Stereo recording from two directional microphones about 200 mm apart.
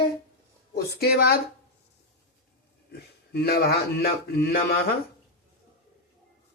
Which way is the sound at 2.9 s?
55° left (ahead or behind).